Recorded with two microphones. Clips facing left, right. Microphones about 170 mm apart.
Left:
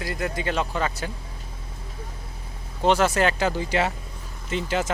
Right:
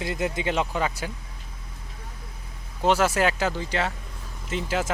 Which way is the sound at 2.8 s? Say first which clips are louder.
Left 1 dB; 5° right (ahead or behind).